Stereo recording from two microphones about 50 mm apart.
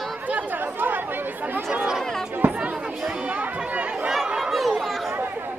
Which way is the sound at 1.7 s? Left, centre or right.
Right.